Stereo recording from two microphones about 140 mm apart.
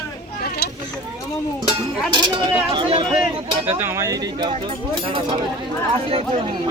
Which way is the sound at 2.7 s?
35° right (ahead or behind).